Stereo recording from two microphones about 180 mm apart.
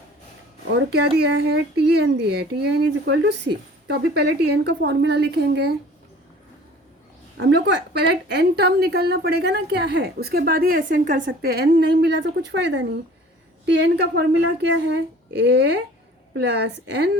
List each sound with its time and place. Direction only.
0.7 s speech: 80° right
7.3 s a woman's voice: 75° right (ahead or behind); by 11.2 s 45° right (ahead or behind)
11.3 s a woman's voice: 65° right (ahead or behind)